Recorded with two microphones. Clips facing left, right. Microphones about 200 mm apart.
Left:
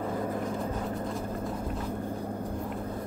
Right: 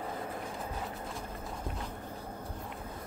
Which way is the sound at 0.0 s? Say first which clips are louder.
Left 8 dB; 45° left (ahead or behind).